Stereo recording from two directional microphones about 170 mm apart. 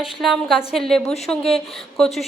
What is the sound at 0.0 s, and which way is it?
A woman's voice, centre (ahead or behind).